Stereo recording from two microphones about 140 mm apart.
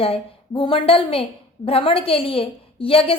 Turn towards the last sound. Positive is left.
turn(degrees=40)  # may be behind; listen again after turning